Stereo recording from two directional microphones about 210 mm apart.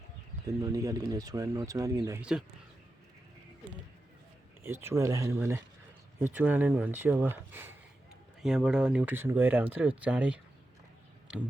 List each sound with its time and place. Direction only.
0.4 s speech: 15° right (ahead or behind)
4.6 s speech: 10° right (ahead or behind)